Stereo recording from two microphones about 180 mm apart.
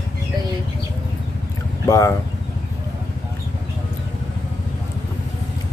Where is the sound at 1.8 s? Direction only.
15° left (ahead or behind).